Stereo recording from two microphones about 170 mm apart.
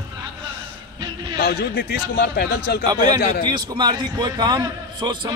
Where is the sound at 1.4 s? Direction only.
65° left (ahead or behind).